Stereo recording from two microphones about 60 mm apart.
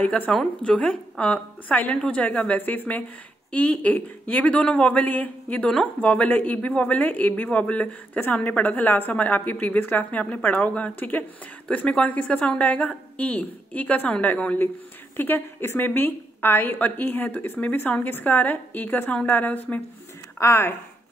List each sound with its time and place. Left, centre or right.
0.0 s speech: left
15.1 s a woman's voice: left
20.3 s speech: left